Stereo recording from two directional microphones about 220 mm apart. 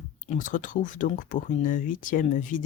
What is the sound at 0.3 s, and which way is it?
Speech, 35° left (ahead or behind).